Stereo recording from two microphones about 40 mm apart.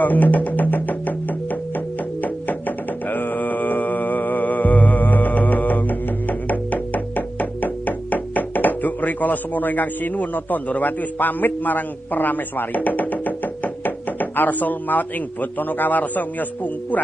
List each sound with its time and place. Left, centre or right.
0.0 s music: left
3.1 s mantra: left
13.8 s knock: left
15.8 s a man's voice: left